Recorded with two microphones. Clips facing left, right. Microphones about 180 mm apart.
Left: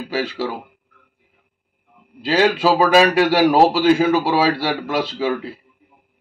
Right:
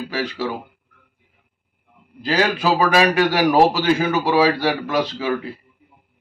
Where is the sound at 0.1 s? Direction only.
25° left (ahead or behind).